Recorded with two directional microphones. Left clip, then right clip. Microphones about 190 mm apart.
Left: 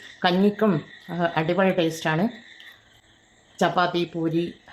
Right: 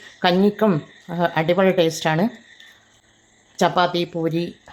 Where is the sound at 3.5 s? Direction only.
25° right (ahead or behind).